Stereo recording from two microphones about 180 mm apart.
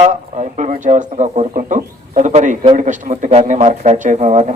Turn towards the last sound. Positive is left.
turn(degrees=-40)  # may be behind; listen again after turning